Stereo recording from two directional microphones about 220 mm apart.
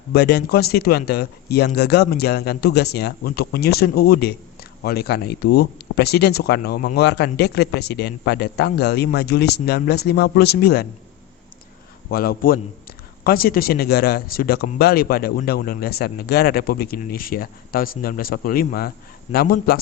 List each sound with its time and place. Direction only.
0.1 s speech: 45° left (ahead or behind)
12.1 s a man's voice: 40° left (ahead or behind)